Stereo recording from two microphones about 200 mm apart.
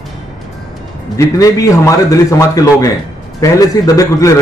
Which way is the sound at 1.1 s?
15° left (ahead or behind).